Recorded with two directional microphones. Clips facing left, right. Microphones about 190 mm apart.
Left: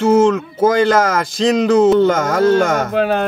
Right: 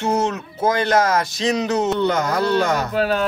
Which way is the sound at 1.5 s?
90° left.